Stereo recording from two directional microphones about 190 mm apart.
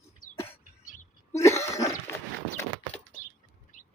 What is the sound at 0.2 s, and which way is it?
Cough, 45° left (ahead or behind).